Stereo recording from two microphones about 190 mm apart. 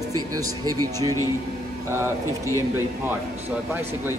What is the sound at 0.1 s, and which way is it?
Speech, 20° right (ahead or behind).